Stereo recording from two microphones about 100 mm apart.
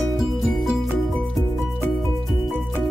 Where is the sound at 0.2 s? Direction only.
Centre (ahead or behind).